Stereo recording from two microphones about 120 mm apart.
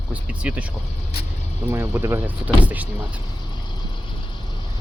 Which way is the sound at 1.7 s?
20° right (ahead or behind).